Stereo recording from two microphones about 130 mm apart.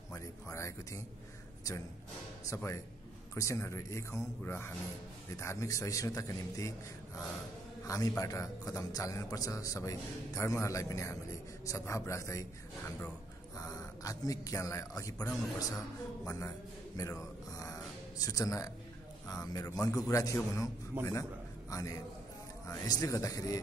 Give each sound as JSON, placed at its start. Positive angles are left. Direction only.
{"t": 0.1, "sound": "a sound", "side_deg": 25}
{"t": 2.4, "sound": "a man's voice", "side_deg": 20}
{"t": 7.8, "sound": "a man's voice", "side_deg": 25}
{"t": 13.6, "sound": "a man's voice", "side_deg": 25}
{"t": 17.6, "sound": "music", "side_deg": 25}
{"t": 19.5, "sound": "a man's voice", "side_deg": 30}